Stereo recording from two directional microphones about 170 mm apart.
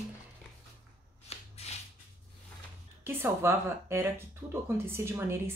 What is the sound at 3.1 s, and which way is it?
A woman's voice, 15° right (ahead or behind).